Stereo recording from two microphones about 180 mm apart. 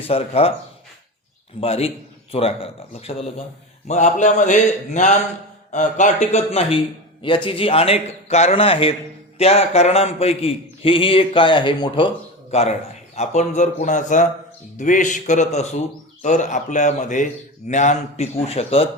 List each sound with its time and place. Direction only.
0.0 s a man's voice: 30° left (ahead or behind)
1.6 s a man's voice: 30° left (ahead or behind)